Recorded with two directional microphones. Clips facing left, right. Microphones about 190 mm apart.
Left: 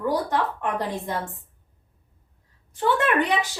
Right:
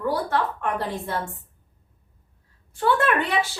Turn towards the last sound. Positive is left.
turn(degrees=20)  # may be behind; listen again after turning